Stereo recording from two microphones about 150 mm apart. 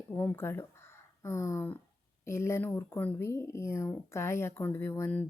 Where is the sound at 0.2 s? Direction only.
10° left (ahead or behind).